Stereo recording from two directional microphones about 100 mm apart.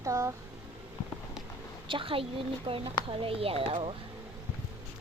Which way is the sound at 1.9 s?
60° right (ahead or behind).